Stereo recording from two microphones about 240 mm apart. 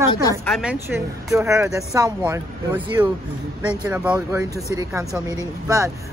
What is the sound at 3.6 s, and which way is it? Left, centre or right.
Speech, centre.